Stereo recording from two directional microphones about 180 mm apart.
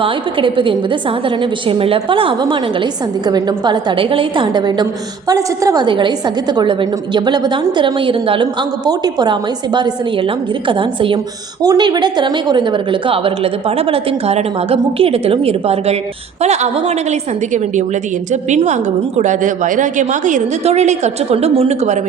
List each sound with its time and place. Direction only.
0.0 s a woman's voice: 30° right (ahead or behind)